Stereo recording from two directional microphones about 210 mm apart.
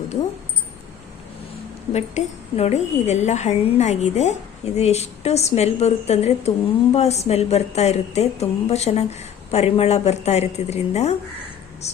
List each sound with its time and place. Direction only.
1.9 s a woman's voice: 30° left (ahead or behind)